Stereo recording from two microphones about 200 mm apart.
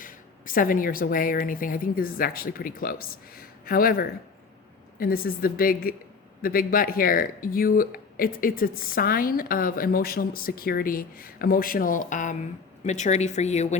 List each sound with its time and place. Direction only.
0.0 s a woman's voice: 45° left (ahead or behind)